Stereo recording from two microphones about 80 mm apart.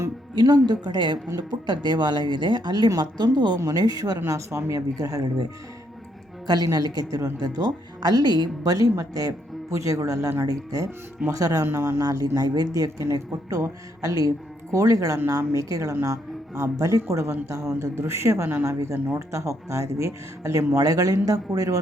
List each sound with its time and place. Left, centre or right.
0.3 s speech: right
3.8 s speech: right
4.3 s speech: right
6.5 s speech: right